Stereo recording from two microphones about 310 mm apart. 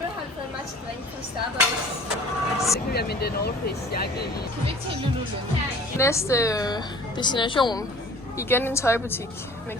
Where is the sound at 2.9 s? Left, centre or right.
Left.